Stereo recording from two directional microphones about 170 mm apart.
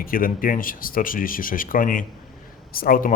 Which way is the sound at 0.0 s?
55° left (ahead or behind).